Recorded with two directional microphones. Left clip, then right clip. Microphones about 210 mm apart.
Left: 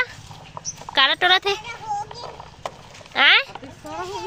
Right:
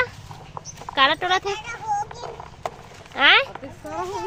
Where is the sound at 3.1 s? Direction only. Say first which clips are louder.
Even; 10° left (ahead or behind).